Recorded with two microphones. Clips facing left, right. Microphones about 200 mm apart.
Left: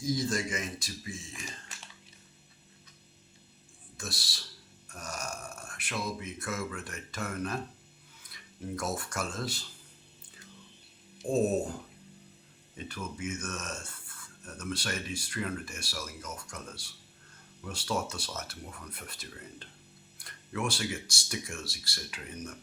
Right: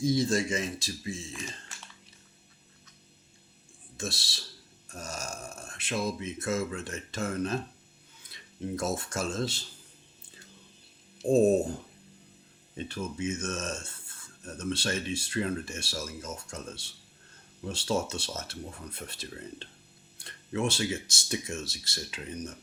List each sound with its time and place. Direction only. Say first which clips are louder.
0.0 s speech: right 5 dB; 25° right (ahead or behind)
3.9 s speech: right 5 dB; 25° right (ahead or behind)
11.2 s speech: right 6 dB; 45° right (ahead or behind)
12.7 s speech: right 5 dB; 25° right (ahead or behind)